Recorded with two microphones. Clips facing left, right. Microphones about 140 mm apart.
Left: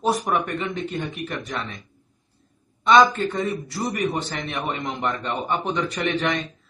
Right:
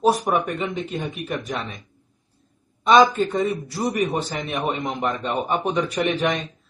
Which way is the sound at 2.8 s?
10° right (ahead or behind).